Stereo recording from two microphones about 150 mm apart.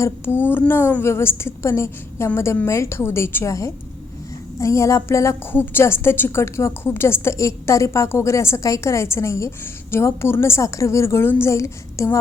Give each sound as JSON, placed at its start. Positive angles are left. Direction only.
{"t": 0.0, "sound": "a woman's voice", "side_deg": 15}